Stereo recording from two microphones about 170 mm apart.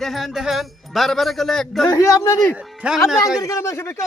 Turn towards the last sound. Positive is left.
turn(degrees=15)  # may be behind; listen again after turning